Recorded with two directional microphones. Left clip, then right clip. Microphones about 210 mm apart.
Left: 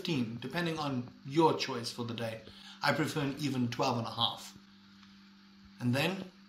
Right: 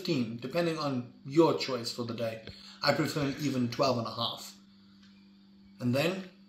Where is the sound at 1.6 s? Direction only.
20° left (ahead or behind).